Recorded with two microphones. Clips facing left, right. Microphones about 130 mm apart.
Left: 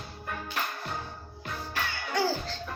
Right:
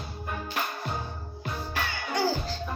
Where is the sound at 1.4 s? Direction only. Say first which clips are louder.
Right 2 dB; 15° right (ahead or behind).